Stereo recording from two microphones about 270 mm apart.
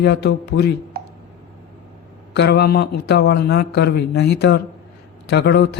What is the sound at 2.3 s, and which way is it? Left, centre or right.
Speech, left.